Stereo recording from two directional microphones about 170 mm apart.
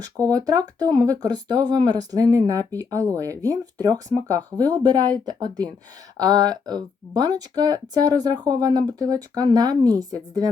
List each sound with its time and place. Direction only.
0.3 s speech: 20° right (ahead or behind)